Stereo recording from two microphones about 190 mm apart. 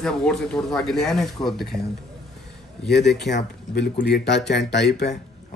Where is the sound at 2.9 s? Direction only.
60° left (ahead or behind).